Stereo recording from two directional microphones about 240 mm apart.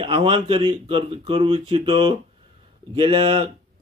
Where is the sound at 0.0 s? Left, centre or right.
Right.